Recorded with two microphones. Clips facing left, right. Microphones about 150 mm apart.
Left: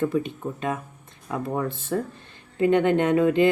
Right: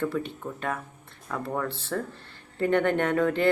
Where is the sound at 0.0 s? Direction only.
15° left (ahead or behind).